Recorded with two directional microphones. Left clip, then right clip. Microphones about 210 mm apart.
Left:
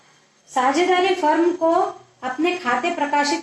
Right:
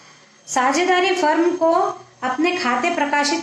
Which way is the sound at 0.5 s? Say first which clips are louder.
Right 1 dB; 35° right (ahead or behind).